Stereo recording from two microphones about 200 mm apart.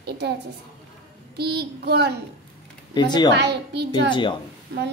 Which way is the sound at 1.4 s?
55° right (ahead or behind).